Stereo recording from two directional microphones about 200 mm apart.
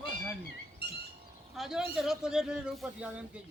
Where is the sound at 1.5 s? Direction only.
Centre (ahead or behind).